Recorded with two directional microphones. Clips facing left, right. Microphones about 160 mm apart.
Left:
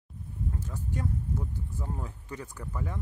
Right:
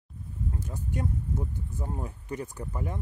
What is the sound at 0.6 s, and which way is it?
Speech, 15° right (ahead or behind).